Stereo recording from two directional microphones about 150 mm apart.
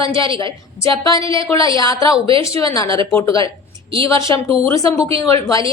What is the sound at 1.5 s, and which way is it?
Speech, 35° right (ahead or behind).